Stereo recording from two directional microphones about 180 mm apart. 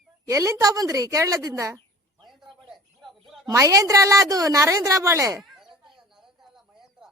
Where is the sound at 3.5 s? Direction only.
15° right (ahead or behind).